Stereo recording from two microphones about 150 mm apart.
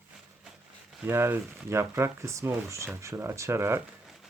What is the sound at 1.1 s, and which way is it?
Speech, 15° right (ahead or behind).